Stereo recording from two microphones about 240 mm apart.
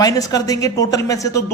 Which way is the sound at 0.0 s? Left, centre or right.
Centre.